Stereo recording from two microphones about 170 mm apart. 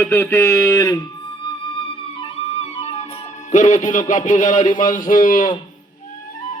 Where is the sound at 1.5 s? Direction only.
30° left (ahead or behind); by 5.5 s 50° left (ahead or behind).